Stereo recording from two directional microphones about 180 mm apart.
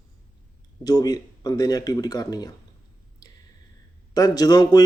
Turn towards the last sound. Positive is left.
turn(degrees=20)  # may be behind; listen again after turning